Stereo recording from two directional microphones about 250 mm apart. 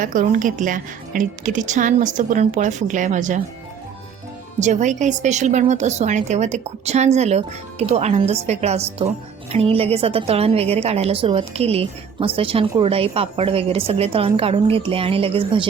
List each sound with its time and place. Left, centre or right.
0.0 s a woman's voice: right
4.6 s a woman's voice: right